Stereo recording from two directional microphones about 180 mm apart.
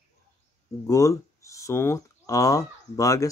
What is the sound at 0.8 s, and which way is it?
Speech, 20° left (ahead or behind).